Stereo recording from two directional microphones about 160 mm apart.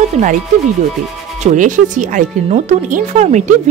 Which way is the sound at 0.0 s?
50° right (ahead or behind).